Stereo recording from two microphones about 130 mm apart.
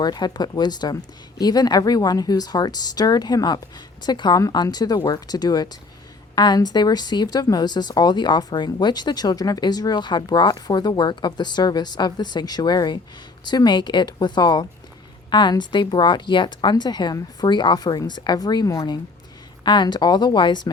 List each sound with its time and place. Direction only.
0.0 s speech: 30° left (ahead or behind)